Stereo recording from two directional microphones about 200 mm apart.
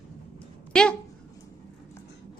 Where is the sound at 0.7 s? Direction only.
5° left (ahead or behind).